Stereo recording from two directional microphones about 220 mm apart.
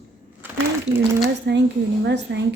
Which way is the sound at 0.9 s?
30° right (ahead or behind).